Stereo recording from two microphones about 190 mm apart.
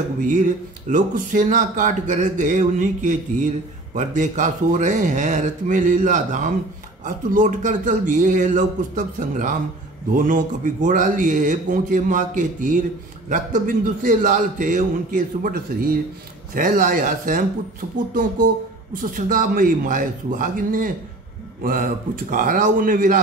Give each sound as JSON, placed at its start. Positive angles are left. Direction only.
{"t": 0.2, "sound": "a man's voice", "side_deg": -40}
{"t": 18.9, "sound": "a man's voice", "side_deg": -45}